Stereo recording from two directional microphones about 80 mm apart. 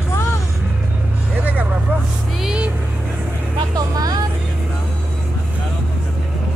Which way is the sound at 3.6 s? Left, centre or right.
Right.